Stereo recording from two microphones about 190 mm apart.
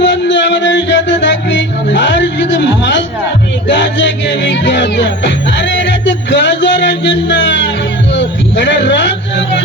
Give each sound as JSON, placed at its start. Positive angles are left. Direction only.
{"t": 0.0, "sound": "music", "side_deg": 70}